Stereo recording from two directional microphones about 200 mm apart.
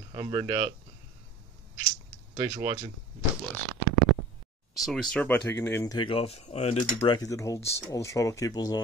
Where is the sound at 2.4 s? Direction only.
25° right (ahead or behind).